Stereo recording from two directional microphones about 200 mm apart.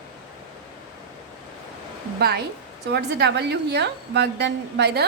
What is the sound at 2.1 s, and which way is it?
A woman's voice, 55° right (ahead or behind).